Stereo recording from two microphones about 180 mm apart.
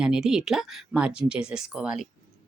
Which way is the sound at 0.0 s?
5° right (ahead or behind).